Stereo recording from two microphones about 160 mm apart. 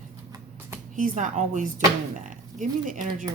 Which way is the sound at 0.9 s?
55° right (ahead or behind).